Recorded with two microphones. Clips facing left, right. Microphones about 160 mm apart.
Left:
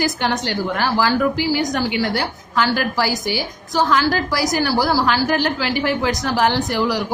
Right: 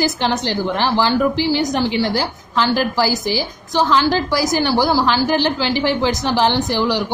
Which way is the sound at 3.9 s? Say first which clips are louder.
Right 3 dB; 25° right (ahead or behind).